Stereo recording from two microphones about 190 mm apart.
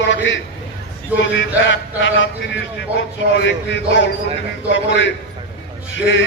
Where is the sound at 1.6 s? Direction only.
80° left.